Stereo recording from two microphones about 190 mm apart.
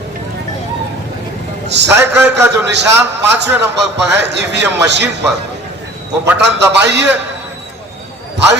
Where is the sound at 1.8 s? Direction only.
10° right (ahead or behind).